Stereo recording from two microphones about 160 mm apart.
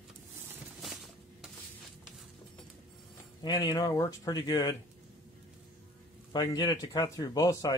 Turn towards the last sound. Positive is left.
turn(degrees=20)  # may be behind; listen again after turning